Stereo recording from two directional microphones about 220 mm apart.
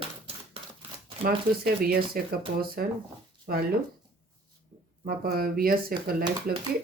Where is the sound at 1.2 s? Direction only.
45° right (ahead or behind).